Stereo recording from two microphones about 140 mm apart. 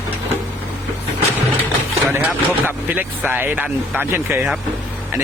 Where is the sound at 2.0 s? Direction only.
15° right (ahead or behind).